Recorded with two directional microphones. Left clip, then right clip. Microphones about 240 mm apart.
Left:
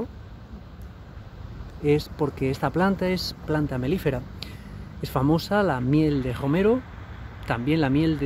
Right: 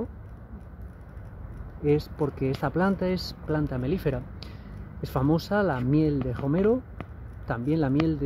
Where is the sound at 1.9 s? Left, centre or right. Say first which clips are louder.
Left 2 dB; centre.